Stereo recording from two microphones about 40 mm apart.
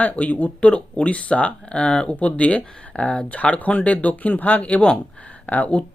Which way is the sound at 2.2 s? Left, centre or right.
Left.